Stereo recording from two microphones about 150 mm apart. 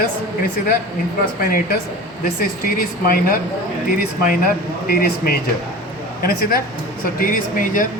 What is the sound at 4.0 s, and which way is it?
Speech, 70° left (ahead or behind).